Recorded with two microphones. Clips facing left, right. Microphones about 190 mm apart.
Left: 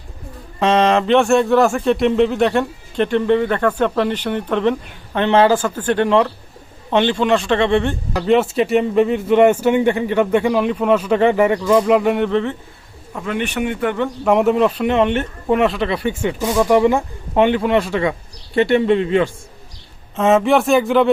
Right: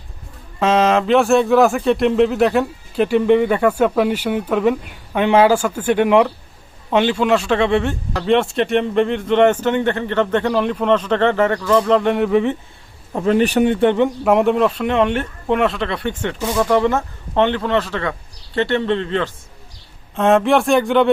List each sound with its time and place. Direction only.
0.6 s speech: 5° right (ahead or behind)
12.3 s speech: 15° right (ahead or behind)
13.1 s speech: 35° right (ahead or behind)
14.3 s speech: centre (ahead or behind)
20.1 s speech: centre (ahead or behind)